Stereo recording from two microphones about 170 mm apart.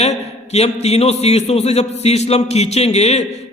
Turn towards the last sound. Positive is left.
turn(degrees=40)  # may be behind; listen again after turning